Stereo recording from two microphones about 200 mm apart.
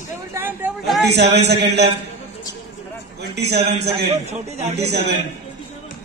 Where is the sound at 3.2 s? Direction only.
55° right (ahead or behind).